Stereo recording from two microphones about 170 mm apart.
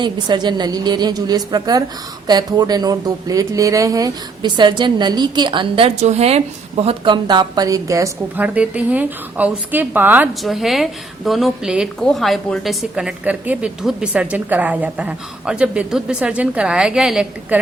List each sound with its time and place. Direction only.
0.0 s a woman's voice: 25° right (ahead or behind); by 17.6 s 5° right (ahead or behind)